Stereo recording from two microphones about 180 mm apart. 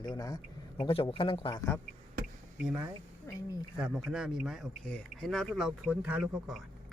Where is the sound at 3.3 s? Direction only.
15° left (ahead or behind).